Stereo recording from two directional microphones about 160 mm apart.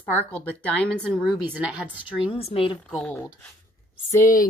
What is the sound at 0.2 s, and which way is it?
Speech, 10° left (ahead or behind).